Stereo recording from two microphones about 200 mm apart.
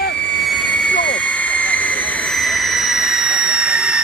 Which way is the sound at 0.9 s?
65° left (ahead or behind).